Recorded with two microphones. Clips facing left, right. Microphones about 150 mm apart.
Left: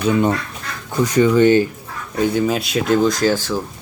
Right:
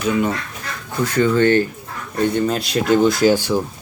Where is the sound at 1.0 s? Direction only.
15° left (ahead or behind).